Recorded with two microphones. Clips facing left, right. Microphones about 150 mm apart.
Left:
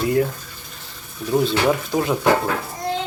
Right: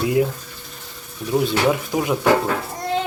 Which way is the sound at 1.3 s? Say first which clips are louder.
Even; 10° right (ahead or behind).